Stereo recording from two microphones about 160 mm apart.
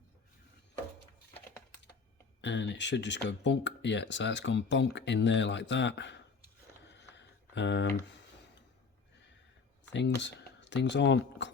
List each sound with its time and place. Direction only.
2.4 s speech: 90° left
7.1 s a sound: 90° left
9.9 s speech: 90° left